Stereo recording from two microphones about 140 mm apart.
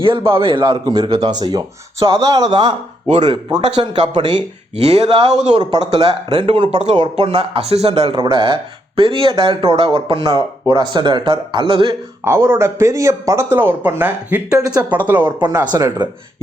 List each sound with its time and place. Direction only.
0.0 s speech: 40° right (ahead or behind)
4.8 s speech: 45° right (ahead or behind)
12.2 s speech: 20° right (ahead or behind)
15.4 s speech: 30° right (ahead or behind)